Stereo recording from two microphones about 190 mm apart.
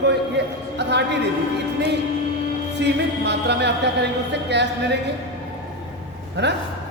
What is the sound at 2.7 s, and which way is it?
Music, 65° right (ahead or behind).